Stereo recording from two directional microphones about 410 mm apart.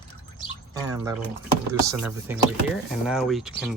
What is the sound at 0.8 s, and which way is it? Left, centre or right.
Speech, centre.